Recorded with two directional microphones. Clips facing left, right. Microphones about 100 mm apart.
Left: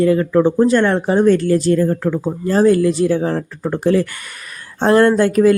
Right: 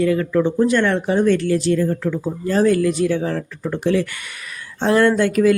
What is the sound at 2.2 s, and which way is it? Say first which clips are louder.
Speech: left 3 dB; 30° left (ahead or behind).